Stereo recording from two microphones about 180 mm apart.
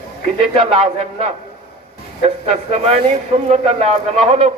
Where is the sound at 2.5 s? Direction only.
35° right (ahead or behind).